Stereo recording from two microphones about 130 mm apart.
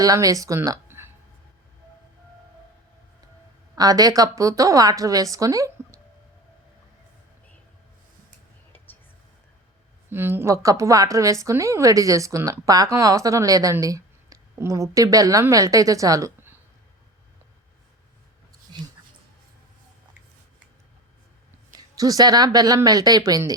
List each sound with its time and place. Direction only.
0.0 s speech: 25° right (ahead or behind)
3.8 s a woman's voice: 30° right (ahead or behind)
10.1 s a woman's voice: 15° right (ahead or behind)
21.7 s a woman's voice: 30° right (ahead or behind)